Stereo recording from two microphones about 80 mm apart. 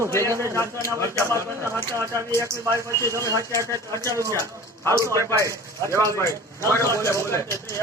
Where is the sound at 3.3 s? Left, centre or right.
Right.